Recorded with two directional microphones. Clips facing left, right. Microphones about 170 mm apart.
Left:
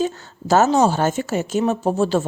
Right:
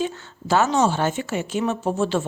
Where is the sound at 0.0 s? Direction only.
40° left (ahead or behind).